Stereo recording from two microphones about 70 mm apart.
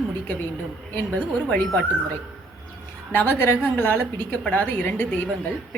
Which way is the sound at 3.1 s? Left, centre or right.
Left.